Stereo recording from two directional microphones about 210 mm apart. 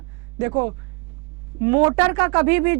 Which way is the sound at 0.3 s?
15° right (ahead or behind).